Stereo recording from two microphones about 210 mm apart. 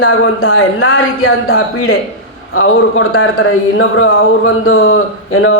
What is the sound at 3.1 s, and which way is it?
Speech, 80° left.